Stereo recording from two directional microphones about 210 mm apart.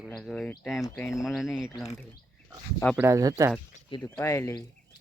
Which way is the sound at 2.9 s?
15° right (ahead or behind).